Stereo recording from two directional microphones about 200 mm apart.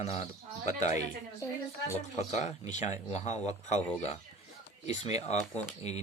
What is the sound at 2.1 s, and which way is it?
Speech, 35° left (ahead or behind).